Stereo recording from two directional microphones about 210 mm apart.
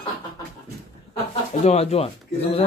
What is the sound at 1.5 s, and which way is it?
Speech, 30° left (ahead or behind).